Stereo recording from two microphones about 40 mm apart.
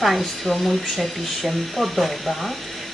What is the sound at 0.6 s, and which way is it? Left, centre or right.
Speech, centre.